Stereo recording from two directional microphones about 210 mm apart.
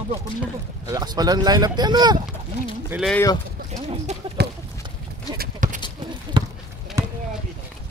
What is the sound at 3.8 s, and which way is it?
Speech, 30° right (ahead or behind).